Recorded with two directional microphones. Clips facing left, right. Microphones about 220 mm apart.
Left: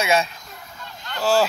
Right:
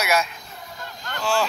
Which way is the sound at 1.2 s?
40° left (ahead or behind).